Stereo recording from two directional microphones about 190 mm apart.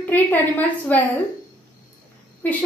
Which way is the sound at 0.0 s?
10° left (ahead or behind).